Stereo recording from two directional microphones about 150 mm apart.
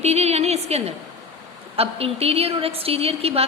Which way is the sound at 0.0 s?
45° right (ahead or behind).